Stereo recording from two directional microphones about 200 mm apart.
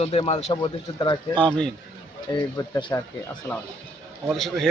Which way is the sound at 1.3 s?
5° left (ahead or behind).